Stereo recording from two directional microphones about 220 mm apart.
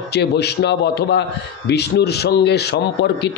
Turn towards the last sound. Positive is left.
turn(degrees=50)  # may be behind; listen again after turning